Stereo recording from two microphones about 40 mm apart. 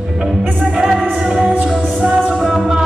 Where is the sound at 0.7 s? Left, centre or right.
Centre.